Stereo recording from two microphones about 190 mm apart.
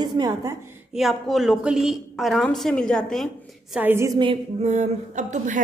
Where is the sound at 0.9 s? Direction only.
Centre (ahead or behind).